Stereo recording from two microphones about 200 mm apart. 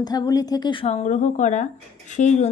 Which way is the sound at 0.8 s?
35° left (ahead or behind).